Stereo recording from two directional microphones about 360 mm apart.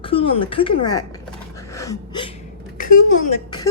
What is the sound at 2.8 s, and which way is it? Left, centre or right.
Speech, left.